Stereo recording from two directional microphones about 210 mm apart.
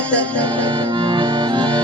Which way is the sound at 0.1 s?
5° left (ahead or behind).